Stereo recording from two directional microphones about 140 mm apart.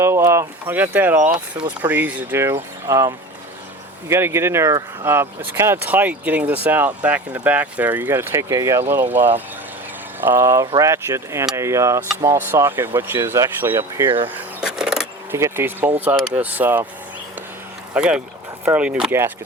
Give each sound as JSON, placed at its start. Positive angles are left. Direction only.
{"t": 0.0, "sound": "speech", "side_deg": -20}
{"t": 14.6, "sound": "vehicle", "side_deg": -5}
{"t": 15.3, "sound": "speech", "side_deg": -20}
{"t": 17.9, "sound": "speech", "side_deg": -5}